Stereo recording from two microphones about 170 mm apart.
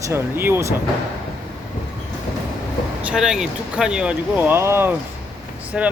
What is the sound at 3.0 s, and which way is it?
Speech, 5° right (ahead or behind).